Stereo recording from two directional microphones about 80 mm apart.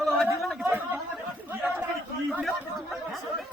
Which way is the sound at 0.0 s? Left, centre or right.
Centre.